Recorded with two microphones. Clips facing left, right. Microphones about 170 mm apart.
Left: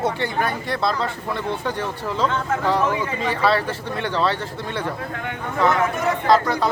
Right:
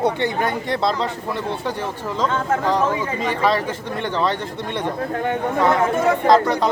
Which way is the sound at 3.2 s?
15° right (ahead or behind).